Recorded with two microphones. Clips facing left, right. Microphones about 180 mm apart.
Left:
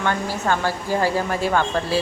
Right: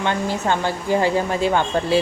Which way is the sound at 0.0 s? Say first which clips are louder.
Right 2 dB; 20° right (ahead or behind).